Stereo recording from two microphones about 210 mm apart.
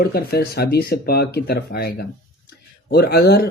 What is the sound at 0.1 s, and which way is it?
Speech, 50° left (ahead or behind).